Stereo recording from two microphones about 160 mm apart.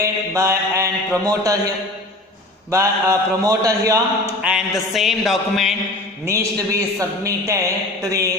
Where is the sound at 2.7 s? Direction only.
20° right (ahead or behind).